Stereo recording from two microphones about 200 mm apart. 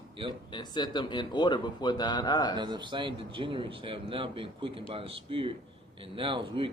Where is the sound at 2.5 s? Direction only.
20° right (ahead or behind).